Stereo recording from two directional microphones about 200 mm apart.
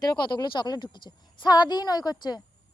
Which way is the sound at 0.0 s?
20° left (ahead or behind).